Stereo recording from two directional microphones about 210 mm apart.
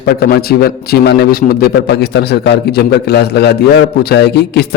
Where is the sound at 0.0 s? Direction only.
50° left (ahead or behind).